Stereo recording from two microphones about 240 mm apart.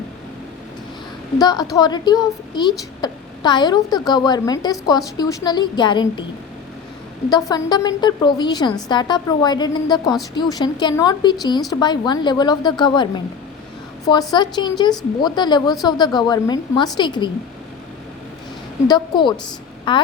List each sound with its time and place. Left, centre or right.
1.4 s a woman's voice: centre
7.3 s a woman's voice: centre
18.9 s a woman's voice: centre